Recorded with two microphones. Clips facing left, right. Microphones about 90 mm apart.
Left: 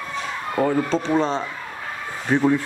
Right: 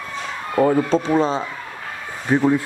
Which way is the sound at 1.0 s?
5° right (ahead or behind).